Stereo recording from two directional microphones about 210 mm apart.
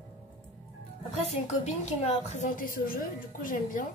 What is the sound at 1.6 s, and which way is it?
A woman's voice, 30° left (ahead or behind).